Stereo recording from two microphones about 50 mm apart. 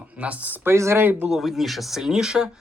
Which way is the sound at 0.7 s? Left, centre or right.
Right.